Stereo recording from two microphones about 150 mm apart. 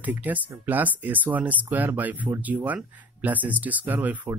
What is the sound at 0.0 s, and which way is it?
Speech, 10° right (ahead or behind).